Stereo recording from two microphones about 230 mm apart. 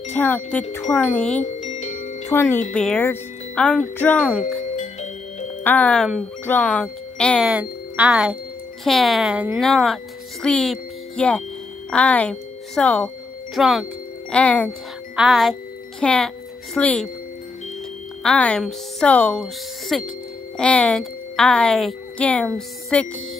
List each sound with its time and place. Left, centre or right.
0.1 s wind chime: centre
1.4 s glockenspiel: left
2.2 s wind chime: centre
2.7 s speech: centre
4.4 s music: left
5.6 s speech: centre
14.3 s wind chime: centre
15.1 s speech: centre
18.2 s a woman's voice: centre